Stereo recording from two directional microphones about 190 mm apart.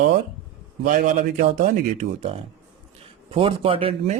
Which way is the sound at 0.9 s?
45° right (ahead or behind).